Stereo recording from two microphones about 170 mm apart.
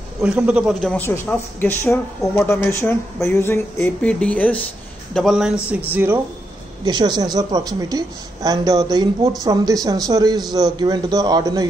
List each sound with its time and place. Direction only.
0.2 s a man's voice: 10° right (ahead or behind)
1.0 s a man's voice: 10° left (ahead or behind)
5.9 s speech: 10° right (ahead or behind)
6.8 s a woman's voice: 25° right (ahead or behind)